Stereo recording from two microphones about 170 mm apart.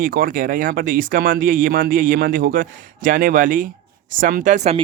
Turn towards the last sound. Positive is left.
turn(degrees=-45)  # may be behind; listen again after turning